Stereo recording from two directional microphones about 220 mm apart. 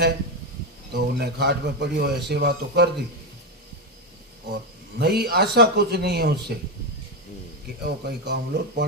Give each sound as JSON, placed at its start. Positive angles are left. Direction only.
{"t": 0.9, "sound": "a man's voice", "side_deg": -45}
{"t": 4.9, "sound": "a man's voice", "side_deg": -45}
{"t": 7.8, "sound": "a man's voice", "side_deg": -50}